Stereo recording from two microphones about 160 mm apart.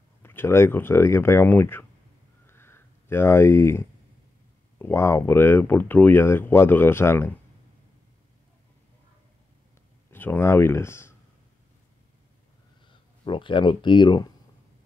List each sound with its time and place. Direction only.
0.2 s speech: 15° left (ahead or behind)
2.4 s a sound: 15° left (ahead or behind)
4.7 s speech: 15° left (ahead or behind)
10.1 s speech: 15° left (ahead or behind)
12.8 s speech: 30° left (ahead or behind)